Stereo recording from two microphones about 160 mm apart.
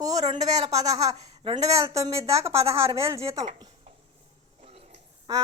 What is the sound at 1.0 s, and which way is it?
Speech, 40° right (ahead or behind).